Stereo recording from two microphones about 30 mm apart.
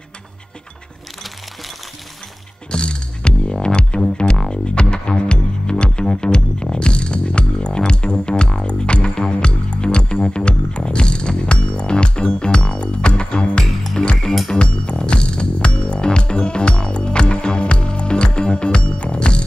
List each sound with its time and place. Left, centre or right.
2.7 s music: left